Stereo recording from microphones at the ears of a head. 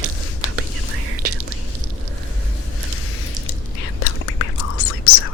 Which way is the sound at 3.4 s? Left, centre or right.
Left.